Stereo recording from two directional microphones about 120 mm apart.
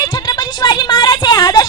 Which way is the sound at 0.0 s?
35° left (ahead or behind).